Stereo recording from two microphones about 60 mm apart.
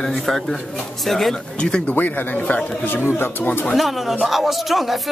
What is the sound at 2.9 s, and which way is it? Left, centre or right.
Speech, left.